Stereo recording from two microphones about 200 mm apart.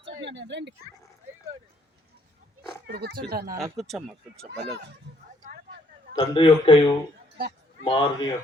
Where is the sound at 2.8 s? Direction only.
55° right (ahead or behind).